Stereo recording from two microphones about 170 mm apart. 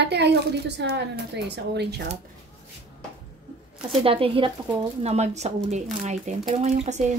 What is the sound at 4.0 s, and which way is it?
Speech, 30° right (ahead or behind).